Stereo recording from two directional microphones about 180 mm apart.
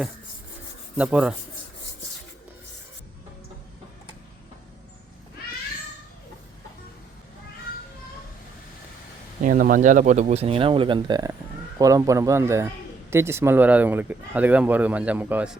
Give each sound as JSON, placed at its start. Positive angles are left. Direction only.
{"t": 0.9, "sound": "speech", "side_deg": -5}
{"t": 9.4, "sound": "speech", "side_deg": -50}